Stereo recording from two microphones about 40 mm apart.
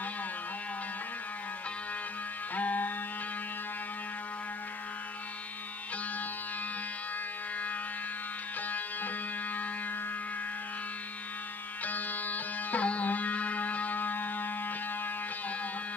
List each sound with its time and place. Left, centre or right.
2.5 s music: left
8.6 s music: left
11.8 s music: left